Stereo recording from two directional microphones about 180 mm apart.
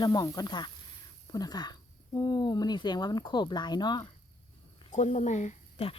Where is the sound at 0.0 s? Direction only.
20° left (ahead or behind).